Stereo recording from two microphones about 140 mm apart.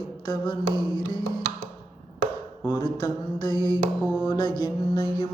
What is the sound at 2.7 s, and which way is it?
Mantra, 35° left (ahead or behind).